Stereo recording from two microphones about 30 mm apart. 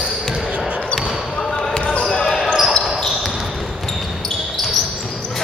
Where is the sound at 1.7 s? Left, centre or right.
Left.